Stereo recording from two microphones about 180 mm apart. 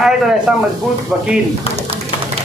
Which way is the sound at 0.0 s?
5° right (ahead or behind).